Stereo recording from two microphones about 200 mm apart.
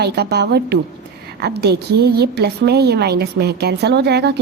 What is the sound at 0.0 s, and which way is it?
A woman's voice, 55° right (ahead or behind).